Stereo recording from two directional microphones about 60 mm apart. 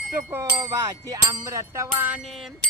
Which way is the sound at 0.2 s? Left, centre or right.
Right.